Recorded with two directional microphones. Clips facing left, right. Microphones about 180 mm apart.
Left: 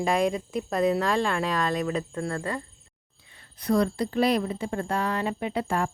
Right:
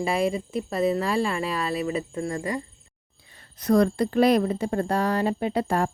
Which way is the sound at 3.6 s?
45° right (ahead or behind).